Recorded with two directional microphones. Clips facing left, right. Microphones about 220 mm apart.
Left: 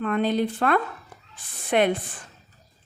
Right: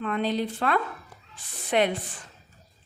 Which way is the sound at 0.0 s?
50° left (ahead or behind).